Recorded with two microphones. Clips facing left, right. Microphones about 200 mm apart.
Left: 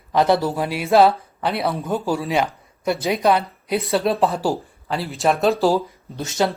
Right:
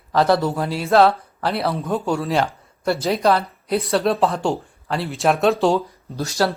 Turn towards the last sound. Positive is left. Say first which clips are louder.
# even
turn(degrees=20)  # may be behind; listen again after turning